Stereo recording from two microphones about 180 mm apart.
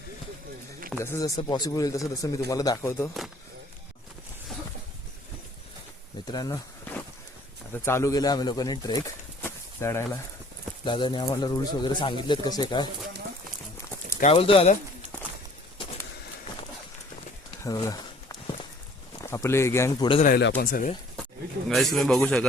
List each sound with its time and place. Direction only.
0.9 s speech: 15° left (ahead or behind)
6.2 s speech: 20° left (ahead or behind)
7.7 s speech: 15° left (ahead or behind)
9.4 s a sound: 15° left (ahead or behind)
10.8 s speech: 25° left (ahead or behind)
14.2 s speech: 35° left (ahead or behind)
17.6 s a sound: 20° left (ahead or behind)
19.2 s speech: 15° left (ahead or behind)
20.3 s speech: 60° left (ahead or behind)
21.7 s a man's voice: centre (ahead or behind)